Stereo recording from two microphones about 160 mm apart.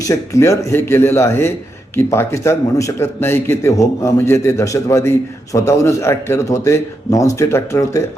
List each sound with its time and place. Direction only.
0.0 s a man's voice: 20° left (ahead or behind)